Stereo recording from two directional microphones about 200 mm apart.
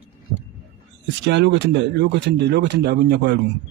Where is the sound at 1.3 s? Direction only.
65° right (ahead or behind).